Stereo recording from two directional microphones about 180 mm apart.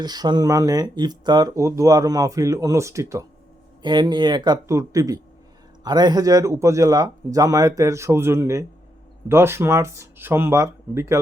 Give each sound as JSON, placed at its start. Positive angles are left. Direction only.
{"t": 0.0, "sound": "speech", "side_deg": -20}